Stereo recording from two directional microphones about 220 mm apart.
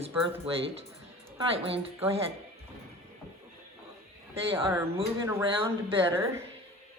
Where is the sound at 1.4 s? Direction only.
25° right (ahead or behind).